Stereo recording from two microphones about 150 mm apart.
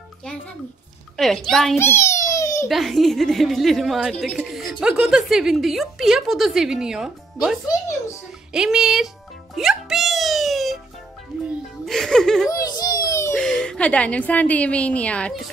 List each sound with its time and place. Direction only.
1.1 s a woman's voice: centre (ahead or behind)
1.8 s babbling: 15° left (ahead or behind)
2.7 s a woman's voice: centre (ahead or behind)
8.5 s a woman's voice: 5° right (ahead or behind)
9.6 s music: centre (ahead or behind)
11.8 s a woman's voice: 5° left (ahead or behind)
12.4 s baby cry: 25° left (ahead or behind)
13.4 s a woman's voice: 5° left (ahead or behind)